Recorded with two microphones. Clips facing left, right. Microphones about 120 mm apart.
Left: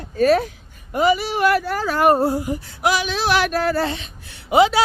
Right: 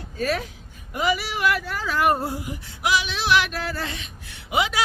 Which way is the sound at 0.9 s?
35° left (ahead or behind).